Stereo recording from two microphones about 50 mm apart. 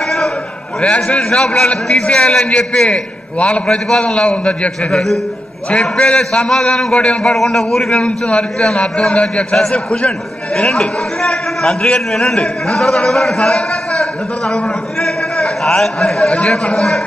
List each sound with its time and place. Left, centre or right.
0.7 s a man's voice: centre
3.6 s a man's voice: centre
6.0 s a man's voice: centre
7.3 s a man's voice: centre
8.0 s a man's voice: left
9.6 s a man's voice: centre